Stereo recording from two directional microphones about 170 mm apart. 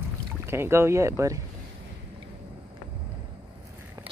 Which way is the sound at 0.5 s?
15° right (ahead or behind).